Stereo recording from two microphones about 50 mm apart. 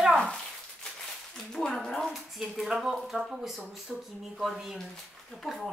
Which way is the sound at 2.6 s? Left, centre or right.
Centre.